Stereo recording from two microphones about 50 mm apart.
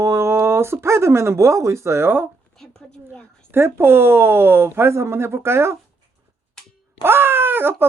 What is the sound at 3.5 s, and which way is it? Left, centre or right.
Speech, right.